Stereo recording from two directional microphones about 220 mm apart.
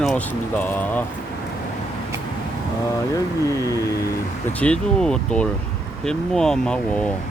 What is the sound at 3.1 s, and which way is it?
Speech, 15° left (ahead or behind).